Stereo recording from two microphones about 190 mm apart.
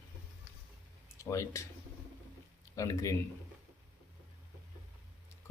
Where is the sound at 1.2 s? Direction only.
15° left (ahead or behind).